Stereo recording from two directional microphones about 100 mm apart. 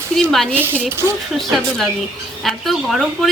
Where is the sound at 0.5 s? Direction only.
25° right (ahead or behind).